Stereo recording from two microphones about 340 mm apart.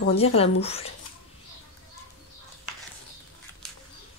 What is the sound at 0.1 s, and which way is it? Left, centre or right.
Speech, centre.